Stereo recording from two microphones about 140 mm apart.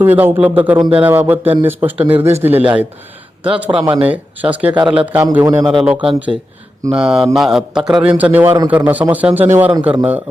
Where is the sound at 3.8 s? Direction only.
35° right (ahead or behind).